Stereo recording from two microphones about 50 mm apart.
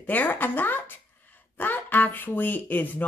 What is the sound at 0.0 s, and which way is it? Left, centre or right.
Speech, left.